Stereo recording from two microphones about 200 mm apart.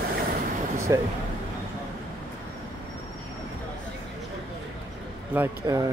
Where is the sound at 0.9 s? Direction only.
15° right (ahead or behind).